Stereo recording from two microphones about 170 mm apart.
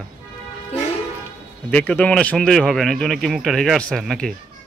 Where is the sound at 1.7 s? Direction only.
10° left (ahead or behind).